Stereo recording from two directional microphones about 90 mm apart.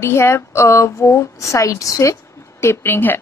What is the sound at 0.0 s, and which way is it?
A woman's voice, 30° left (ahead or behind).